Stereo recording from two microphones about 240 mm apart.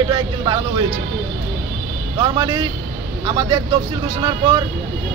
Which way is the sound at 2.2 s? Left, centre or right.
Centre.